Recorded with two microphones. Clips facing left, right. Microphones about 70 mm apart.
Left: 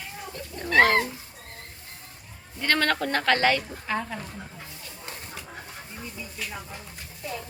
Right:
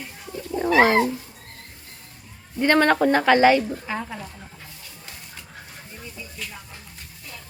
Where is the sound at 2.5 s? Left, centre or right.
Centre.